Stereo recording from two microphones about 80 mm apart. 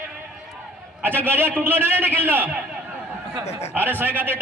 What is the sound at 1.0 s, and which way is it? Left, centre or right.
A man's voice, right.